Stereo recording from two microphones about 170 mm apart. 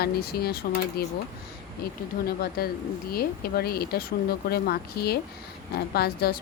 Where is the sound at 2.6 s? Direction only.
65° left (ahead or behind).